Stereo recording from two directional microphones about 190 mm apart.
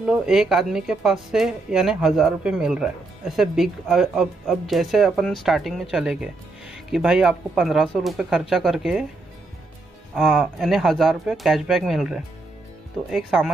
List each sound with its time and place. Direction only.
0.0 s speech: 5° right (ahead or behind)
10.1 s speech: centre (ahead or behind)